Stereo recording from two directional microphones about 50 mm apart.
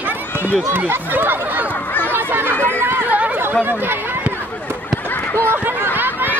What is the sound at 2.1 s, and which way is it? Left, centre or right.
Chatter, right.